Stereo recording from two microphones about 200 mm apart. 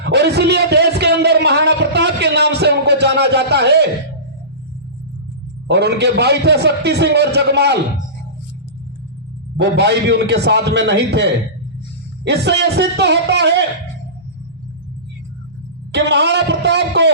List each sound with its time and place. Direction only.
0.0 s a sound: 55° right (ahead or behind)
5.6 s a man's voice: 55° right (ahead or behind)
9.6 s a man's voice: 60° right (ahead or behind)
15.9 s a man's voice: 60° right (ahead or behind)